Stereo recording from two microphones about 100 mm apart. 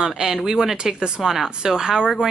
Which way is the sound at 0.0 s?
5° right (ahead or behind).